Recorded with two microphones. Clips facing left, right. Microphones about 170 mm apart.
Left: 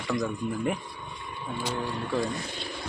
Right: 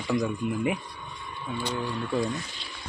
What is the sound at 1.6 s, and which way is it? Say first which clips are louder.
Speech: right 1 dB; 10° left (ahead or behind).